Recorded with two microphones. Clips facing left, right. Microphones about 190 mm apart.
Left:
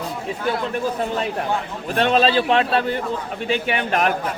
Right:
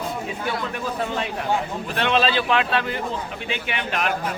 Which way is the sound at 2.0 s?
40° left (ahead or behind).